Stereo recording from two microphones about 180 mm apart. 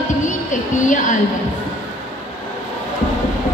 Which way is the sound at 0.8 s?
45° left (ahead or behind).